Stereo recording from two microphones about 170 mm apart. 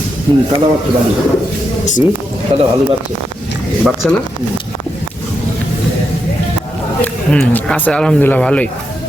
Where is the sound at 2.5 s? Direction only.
35° right (ahead or behind).